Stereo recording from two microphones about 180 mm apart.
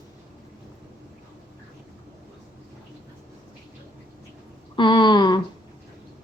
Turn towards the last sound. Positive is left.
turn(degrees=25)  # may be behind; listen again after turning